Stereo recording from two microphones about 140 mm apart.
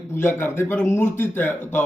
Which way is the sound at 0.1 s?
15° left (ahead or behind).